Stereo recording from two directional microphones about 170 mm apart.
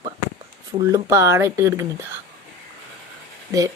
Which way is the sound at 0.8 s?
20° right (ahead or behind).